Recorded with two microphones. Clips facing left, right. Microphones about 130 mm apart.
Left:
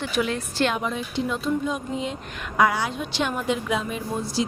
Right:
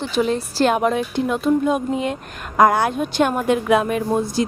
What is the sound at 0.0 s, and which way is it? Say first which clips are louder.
Speech: right 5 dB; 35° right (ahead or behind).